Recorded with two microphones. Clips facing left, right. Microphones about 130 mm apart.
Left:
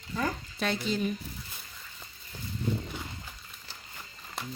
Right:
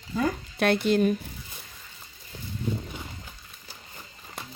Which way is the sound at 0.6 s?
60° right (ahead or behind).